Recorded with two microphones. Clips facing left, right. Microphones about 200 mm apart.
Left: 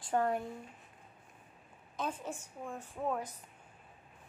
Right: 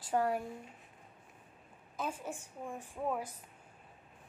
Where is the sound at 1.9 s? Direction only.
10° right (ahead or behind).